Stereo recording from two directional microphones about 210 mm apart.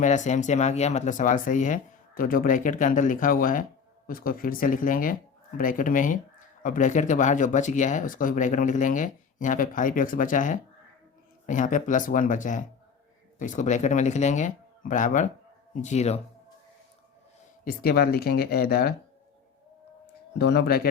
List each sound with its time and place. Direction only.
0.0 s speech: 35° left (ahead or behind)
17.7 s speech: 45° left (ahead or behind)
20.4 s speech: 50° left (ahead or behind)